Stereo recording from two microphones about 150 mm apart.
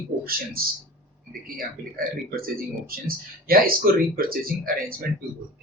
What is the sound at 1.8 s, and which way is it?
A man's voice, 80° right.